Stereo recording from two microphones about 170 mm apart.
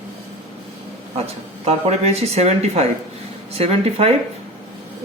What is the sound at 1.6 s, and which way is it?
Speech, 40° right (ahead or behind).